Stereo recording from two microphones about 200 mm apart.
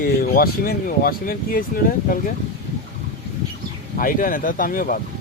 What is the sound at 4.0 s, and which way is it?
Speech, 45° left (ahead or behind).